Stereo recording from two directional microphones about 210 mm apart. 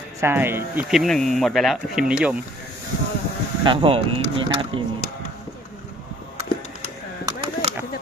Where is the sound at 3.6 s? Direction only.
25° right (ahead or behind).